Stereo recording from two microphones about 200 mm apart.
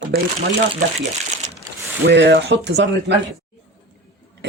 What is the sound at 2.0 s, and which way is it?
Speech, 55° right (ahead or behind).